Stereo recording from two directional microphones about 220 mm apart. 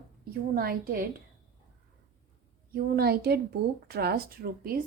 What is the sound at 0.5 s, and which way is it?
Speech, 40° right (ahead or behind).